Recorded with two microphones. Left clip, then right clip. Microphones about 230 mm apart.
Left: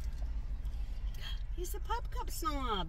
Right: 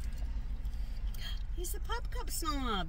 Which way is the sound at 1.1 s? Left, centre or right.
Right.